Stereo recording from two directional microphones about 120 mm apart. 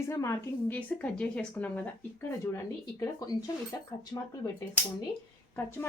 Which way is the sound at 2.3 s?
25° left (ahead or behind).